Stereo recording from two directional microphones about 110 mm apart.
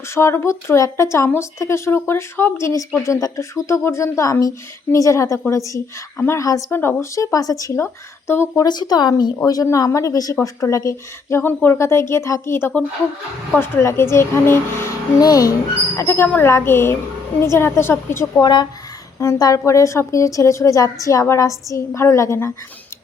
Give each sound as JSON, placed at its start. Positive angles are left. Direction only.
{"t": 0.1, "sound": "a woman's voice", "side_deg": 25}
{"t": 8.3, "sound": "a woman's voice", "side_deg": 20}
{"t": 8.6, "sound": "a woman's voice", "side_deg": 40}
{"t": 15.2, "sound": "a woman's voice", "side_deg": 35}
{"t": 18.4, "sound": "a woman's voice", "side_deg": 40}